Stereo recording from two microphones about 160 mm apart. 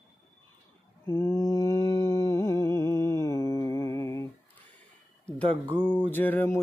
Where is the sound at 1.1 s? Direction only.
15° left (ahead or behind).